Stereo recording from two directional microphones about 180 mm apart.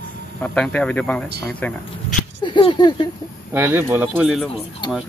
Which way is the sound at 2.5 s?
25° left (ahead or behind).